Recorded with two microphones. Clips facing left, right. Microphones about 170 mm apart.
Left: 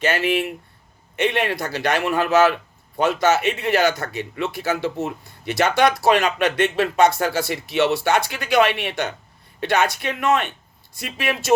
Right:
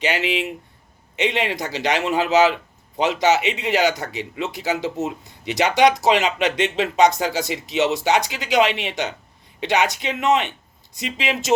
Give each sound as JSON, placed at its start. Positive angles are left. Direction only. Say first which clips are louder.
{"t": 0.0, "sound": "speech", "louder": "left 2 dB", "side_deg": -15}